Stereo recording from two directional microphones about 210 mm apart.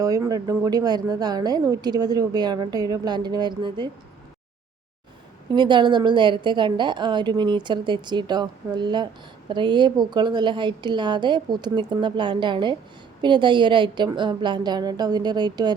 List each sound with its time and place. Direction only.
0.0 s speech: 15° right (ahead or behind)
5.5 s speech: 20° right (ahead or behind)